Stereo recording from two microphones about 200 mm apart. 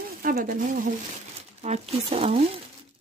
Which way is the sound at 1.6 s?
30° right (ahead or behind).